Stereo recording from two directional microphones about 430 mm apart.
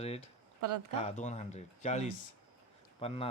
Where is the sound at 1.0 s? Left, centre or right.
Centre.